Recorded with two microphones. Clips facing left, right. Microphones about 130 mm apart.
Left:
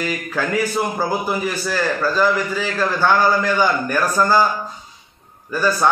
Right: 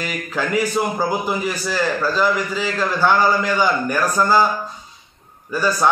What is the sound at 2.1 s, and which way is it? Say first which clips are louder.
A man's voice: left 1 dB; 15° right (ahead or behind).